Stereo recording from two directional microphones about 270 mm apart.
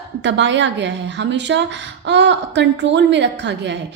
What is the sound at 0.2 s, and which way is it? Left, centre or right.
A woman's voice, right.